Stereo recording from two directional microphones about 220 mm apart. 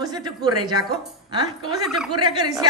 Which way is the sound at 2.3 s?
15° right (ahead or behind).